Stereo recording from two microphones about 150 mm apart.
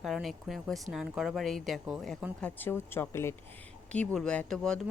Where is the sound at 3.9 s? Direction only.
5° left (ahead or behind).